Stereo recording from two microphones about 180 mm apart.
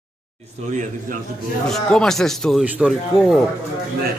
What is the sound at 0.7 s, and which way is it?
Speech, 45° right (ahead or behind).